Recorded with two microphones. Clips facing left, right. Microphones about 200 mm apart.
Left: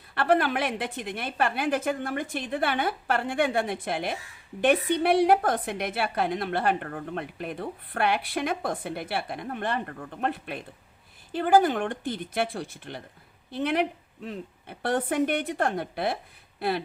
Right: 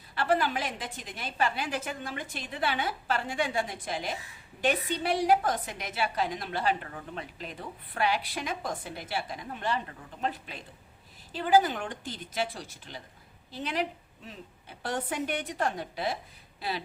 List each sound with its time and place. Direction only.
0.1 s a woman's voice: 60° left (ahead or behind)